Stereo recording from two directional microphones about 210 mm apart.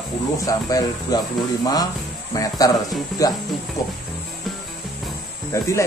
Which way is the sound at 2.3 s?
15° left (ahead or behind).